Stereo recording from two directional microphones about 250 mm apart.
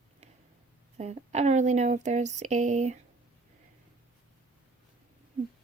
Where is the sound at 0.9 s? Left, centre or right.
Right.